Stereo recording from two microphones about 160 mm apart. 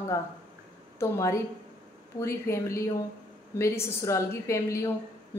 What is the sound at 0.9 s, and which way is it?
A woman's voice, 20° left (ahead or behind).